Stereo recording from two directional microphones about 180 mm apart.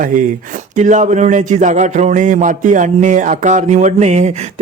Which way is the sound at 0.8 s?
40° right (ahead or behind).